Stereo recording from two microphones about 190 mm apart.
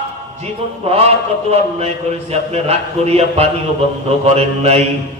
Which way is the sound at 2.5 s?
35° right (ahead or behind).